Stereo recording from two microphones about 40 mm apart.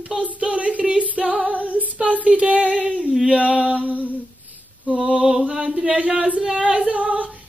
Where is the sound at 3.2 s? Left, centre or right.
Right.